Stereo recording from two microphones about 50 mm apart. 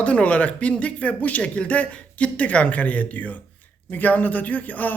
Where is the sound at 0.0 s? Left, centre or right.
Left.